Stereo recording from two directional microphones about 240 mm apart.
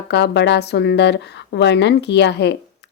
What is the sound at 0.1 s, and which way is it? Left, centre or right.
A woman's voice, left.